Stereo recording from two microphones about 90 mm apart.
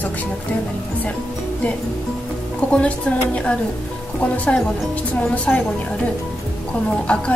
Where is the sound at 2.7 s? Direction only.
15° left (ahead or behind).